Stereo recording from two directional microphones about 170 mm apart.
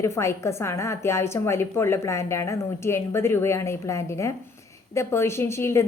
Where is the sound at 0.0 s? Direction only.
15° left (ahead or behind).